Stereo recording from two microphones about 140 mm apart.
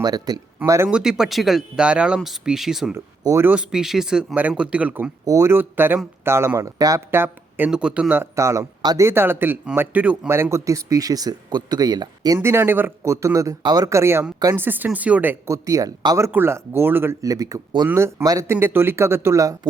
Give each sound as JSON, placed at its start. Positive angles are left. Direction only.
{"t": 0.0, "sound": "speech", "side_deg": -30}
{"t": 0.9, "sound": "speech", "side_deg": -5}
{"t": 2.9, "sound": "speech", "side_deg": -20}
{"t": 3.5, "sound": "speech", "side_deg": -5}
{"t": 5.2, "sound": "speech", "side_deg": -25}
{"t": 12.4, "sound": "speech", "side_deg": -15}